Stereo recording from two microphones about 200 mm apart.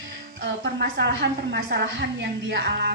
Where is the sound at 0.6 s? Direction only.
55° right (ahead or behind).